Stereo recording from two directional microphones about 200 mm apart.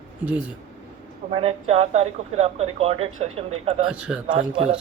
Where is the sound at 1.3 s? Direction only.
30° right (ahead or behind).